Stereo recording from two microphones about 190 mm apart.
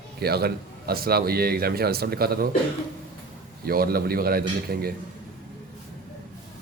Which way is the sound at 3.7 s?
50° right (ahead or behind).